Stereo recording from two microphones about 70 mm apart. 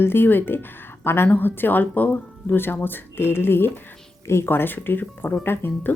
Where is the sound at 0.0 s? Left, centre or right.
Left.